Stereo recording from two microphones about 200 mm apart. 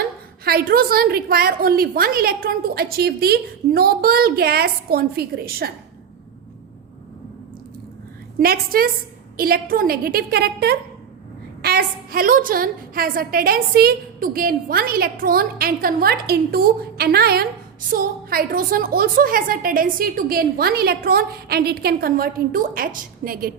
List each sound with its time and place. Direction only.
0.4 s a woman's voice: 50° right (ahead or behind)
8.4 s a woman's voice: 50° right (ahead or behind)